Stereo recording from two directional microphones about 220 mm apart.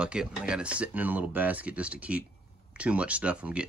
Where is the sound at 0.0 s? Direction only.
5° right (ahead or behind).